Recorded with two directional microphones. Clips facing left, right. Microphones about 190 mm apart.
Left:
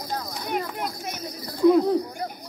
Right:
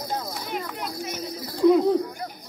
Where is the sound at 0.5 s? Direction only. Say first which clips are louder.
Left 4 dB; 50° left (ahead or behind).